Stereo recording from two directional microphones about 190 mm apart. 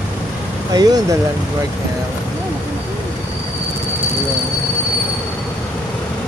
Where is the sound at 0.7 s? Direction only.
20° right (ahead or behind).